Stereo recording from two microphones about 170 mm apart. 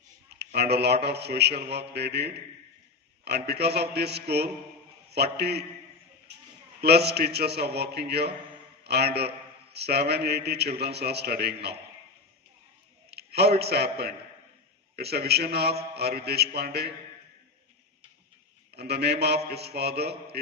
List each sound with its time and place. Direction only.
0.3 s a man's voice: 75° right (ahead or behind)
6.3 s a sound: 90° right
6.8 s a man's voice: 70° right (ahead or behind)
13.1 s a man's voice: 70° right (ahead or behind)
18.7 s a man's voice: 70° right (ahead or behind)